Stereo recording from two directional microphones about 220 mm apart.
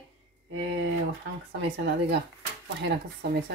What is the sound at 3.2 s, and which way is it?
Speech, 50° right (ahead or behind).